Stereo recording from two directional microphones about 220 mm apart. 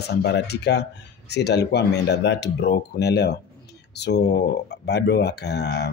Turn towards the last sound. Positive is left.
turn(degrees=50)  # may be behind; listen again after turning